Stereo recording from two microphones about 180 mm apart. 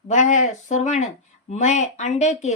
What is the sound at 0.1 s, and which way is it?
Speech, 40° left (ahead or behind).